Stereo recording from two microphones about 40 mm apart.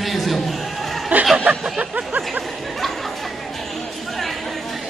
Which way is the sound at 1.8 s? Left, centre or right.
Right.